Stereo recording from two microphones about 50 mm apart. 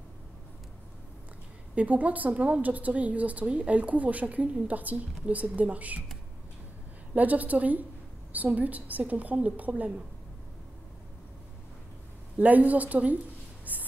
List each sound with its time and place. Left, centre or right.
1.8 s a woman's voice: right
7.2 s a woman's voice: right
12.4 s a woman's voice: right
13.7 s a sound: right